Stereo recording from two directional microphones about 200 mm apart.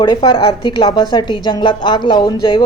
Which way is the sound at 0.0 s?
20° left (ahead or behind).